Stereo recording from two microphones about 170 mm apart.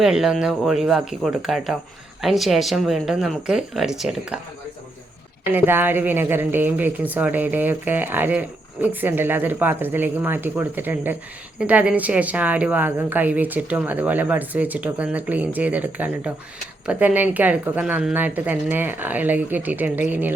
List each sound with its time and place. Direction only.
0.0 s speech: 5° right (ahead or behind)
5.5 s speech: 10° right (ahead or behind)